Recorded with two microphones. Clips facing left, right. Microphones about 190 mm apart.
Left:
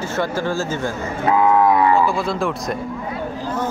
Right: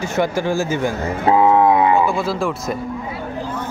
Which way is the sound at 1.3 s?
25° right (ahead or behind).